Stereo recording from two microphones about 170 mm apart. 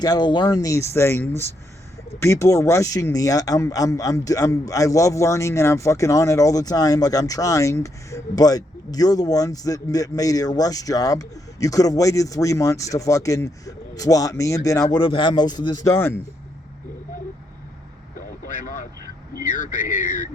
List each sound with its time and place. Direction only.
0.0 s speech: 25° left (ahead or behind)
14.8 s speech: 30° left (ahead or behind)
18.4 s vehicle: 50° left (ahead or behind)
19.4 s speech: 50° left (ahead or behind)